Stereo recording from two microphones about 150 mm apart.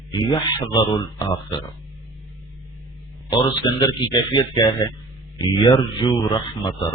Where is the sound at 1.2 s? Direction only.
30° left (ahead or behind).